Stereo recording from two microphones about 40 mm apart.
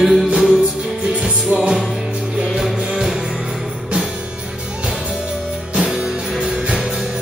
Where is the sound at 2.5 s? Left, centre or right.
Centre.